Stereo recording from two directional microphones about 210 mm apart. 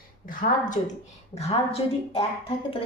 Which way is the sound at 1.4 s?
30° left (ahead or behind).